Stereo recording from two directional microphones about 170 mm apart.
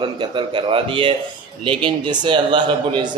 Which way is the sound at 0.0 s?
30° right (ahead or behind).